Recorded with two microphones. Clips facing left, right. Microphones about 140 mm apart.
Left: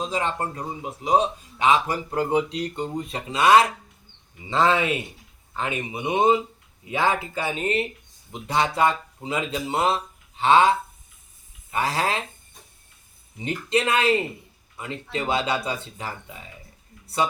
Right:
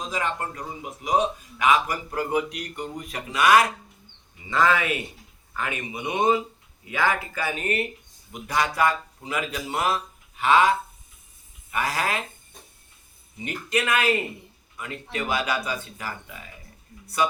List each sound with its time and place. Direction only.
0.0 s a man's voice: 30° left (ahead or behind)
13.4 s a man's voice: 30° left (ahead or behind)